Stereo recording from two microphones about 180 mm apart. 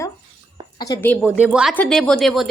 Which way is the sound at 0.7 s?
25° left (ahead or behind).